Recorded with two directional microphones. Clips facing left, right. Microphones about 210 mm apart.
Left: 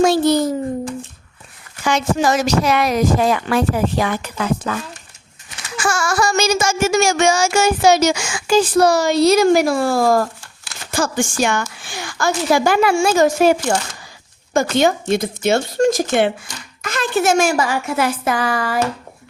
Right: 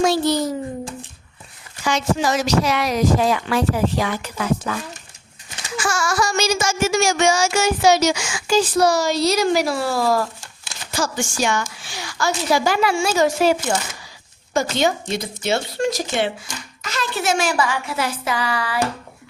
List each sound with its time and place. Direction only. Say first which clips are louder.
0.0 s a sound: left 4 dB; 50° left (ahead or behind)
1.8 s child singing: left 3 dB; 55° left (ahead or behind)
5.8 s child singing: left 3 dB; 50° left (ahead or behind)